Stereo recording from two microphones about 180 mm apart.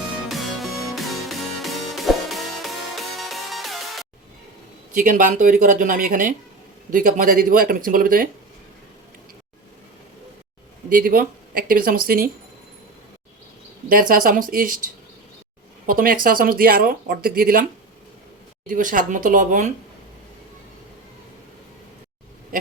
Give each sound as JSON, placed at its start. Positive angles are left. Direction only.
{"t": 0.3, "sound": "music", "side_deg": 0}
{"t": 4.9, "sound": "speech", "side_deg": -50}
{"t": 10.8, "sound": "speech", "side_deg": -50}
{"t": 13.9, "sound": "speech", "side_deg": -50}
{"t": 15.9, "sound": "speech", "side_deg": -50}
{"t": 18.7, "sound": "speech", "side_deg": -50}